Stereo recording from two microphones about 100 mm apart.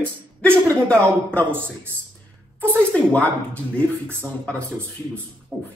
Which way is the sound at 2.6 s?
15° left (ahead or behind).